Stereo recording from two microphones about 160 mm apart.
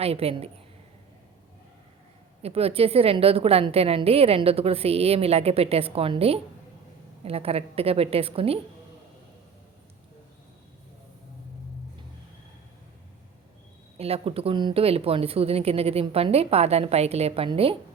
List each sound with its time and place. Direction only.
0.0 s a woman's voice: 40° right (ahead or behind)
2.4 s a woman's voice: 40° right (ahead or behind)
14.0 s a woman's voice: 35° right (ahead or behind)